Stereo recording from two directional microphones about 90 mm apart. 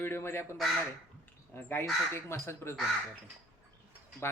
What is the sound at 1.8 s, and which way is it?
Speech, 30° left (ahead or behind).